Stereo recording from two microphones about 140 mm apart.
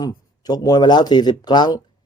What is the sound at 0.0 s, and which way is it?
A man's voice, 30° left (ahead or behind).